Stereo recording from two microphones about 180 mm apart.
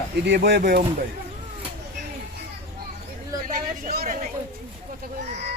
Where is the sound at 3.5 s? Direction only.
55° right (ahead or behind).